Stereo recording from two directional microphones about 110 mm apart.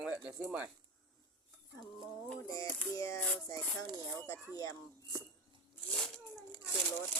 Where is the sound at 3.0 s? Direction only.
30° left (ahead or behind).